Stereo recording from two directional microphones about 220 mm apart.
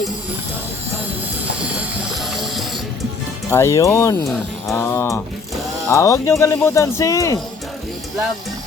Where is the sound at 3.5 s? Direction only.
15° left (ahead or behind).